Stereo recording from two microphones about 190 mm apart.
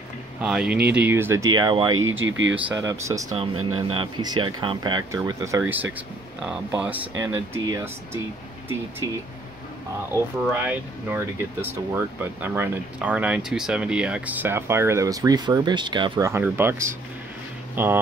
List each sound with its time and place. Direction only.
0.4 s speech: 5° right (ahead or behind); by 2.0 s 25° right (ahead or behind)
2.0 s speech: 90° right
2.5 s speech: 15° right (ahead or behind)
10.1 s speech: 10° right (ahead or behind)